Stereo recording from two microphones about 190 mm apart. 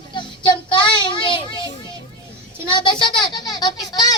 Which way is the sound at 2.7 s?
25° left (ahead or behind).